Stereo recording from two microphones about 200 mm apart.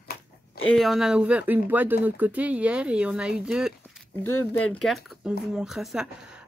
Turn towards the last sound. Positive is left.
turn(degrees=-5)  # may be behind; listen again after turning